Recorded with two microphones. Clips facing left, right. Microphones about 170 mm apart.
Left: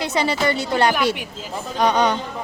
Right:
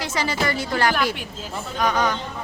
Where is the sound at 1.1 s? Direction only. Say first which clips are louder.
Left 1 dB; 10° left (ahead or behind).